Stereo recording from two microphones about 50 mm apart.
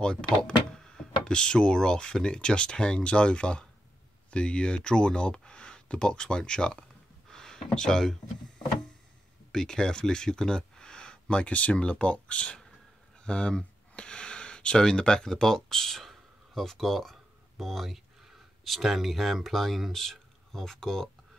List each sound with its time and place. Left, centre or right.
0.0 s speech: centre
9.5 s speech: centre